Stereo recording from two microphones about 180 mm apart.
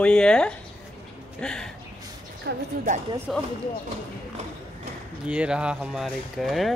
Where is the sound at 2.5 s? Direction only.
65° right (ahead or behind).